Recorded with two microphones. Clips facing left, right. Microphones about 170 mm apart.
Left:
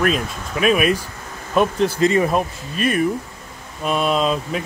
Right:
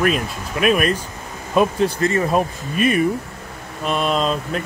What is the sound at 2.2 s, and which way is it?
Speech, 5° right (ahead or behind).